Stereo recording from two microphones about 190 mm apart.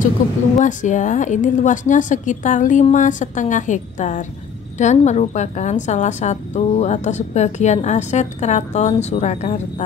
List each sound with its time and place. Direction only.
0.6 s a woman's voice: 40° left (ahead or behind)